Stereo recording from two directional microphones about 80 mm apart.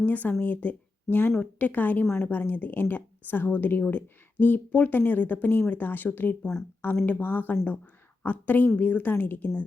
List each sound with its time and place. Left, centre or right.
0.0 s speech: left